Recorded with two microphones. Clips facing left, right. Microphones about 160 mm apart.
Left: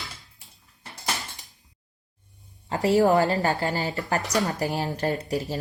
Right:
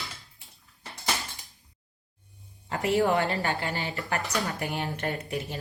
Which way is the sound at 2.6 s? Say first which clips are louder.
Left 5 dB; 35° left (ahead or behind).